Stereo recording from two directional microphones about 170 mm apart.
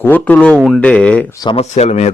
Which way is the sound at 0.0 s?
10° left (ahead or behind).